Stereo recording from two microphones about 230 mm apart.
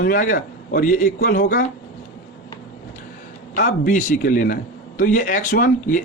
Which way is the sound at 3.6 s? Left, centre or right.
Left.